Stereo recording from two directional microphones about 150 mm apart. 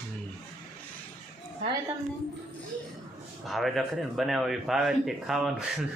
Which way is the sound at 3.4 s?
Centre (ahead or behind).